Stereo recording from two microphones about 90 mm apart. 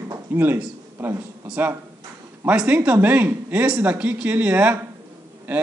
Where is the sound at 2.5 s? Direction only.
10° right (ahead or behind).